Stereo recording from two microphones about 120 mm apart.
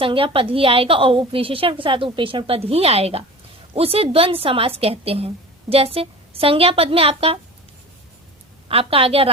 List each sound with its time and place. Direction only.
0.0 s a woman's voice: 45° right (ahead or behind)
8.6 s a woman's voice: 50° right (ahead or behind)